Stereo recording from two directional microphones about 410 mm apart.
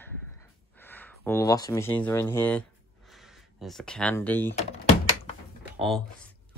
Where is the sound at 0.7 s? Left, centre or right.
Centre.